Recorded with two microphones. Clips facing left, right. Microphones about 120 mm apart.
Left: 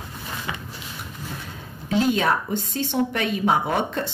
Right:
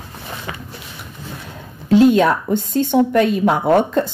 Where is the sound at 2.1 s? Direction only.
55° right (ahead or behind).